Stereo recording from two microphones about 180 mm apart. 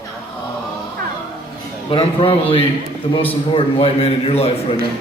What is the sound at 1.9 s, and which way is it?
A man's voice, 30° left (ahead or behind).